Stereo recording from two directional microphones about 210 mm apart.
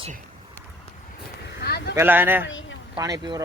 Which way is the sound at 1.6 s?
50° left (ahead or behind).